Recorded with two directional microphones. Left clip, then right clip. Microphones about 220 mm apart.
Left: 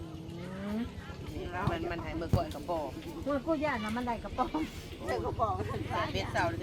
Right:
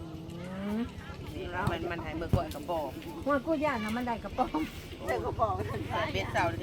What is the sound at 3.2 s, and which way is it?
Speech, 35° right (ahead or behind).